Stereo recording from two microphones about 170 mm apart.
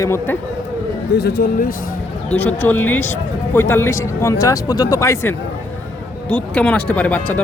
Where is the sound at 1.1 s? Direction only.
75° left (ahead or behind).